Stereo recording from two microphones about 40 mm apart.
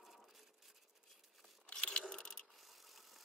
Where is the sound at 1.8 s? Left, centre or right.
Centre.